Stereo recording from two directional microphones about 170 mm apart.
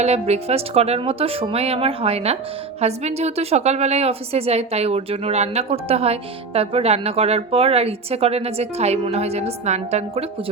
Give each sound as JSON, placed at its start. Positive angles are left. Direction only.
{"t": 0.0, "sound": "a woman's voice", "side_deg": -40}